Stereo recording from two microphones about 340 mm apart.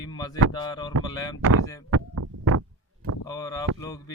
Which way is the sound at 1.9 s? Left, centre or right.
Right.